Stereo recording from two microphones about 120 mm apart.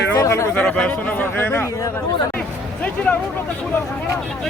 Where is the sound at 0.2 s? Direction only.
25° left (ahead or behind).